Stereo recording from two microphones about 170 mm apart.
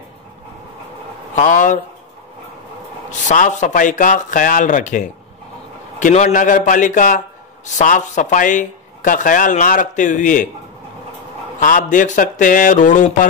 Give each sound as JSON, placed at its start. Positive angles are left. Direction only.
{"t": 1.3, "sound": "speech", "side_deg": 50}
{"t": 3.1, "sound": "speech", "side_deg": 45}
{"t": 11.6, "sound": "speech", "side_deg": 50}